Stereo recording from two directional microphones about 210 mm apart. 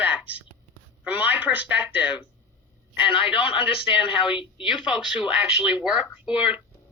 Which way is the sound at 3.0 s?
25° left (ahead or behind).